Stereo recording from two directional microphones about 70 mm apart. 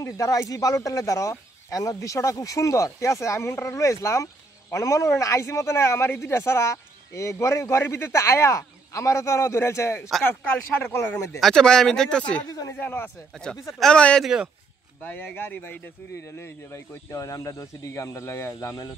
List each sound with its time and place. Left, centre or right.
0.0 s speech: left
10.2 s speech: left
11.3 s speech: centre
12.4 s speech: left
12.7 s speech: left
13.7 s speech: centre
14.2 s speech: centre
15.0 s speech: left
17.1 s speech: left